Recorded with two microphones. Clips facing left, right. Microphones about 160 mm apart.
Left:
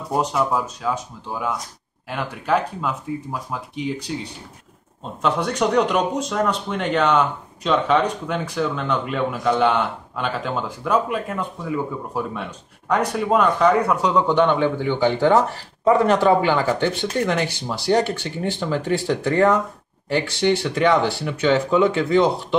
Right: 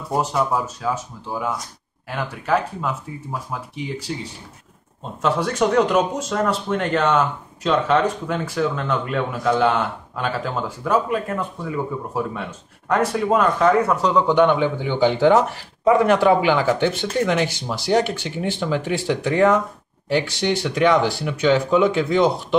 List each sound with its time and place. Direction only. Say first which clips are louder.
0.1 s speech: even; centre (ahead or behind)
2.0 s speech: even; centre (ahead or behind); by 22.6 s 15° right (ahead or behind)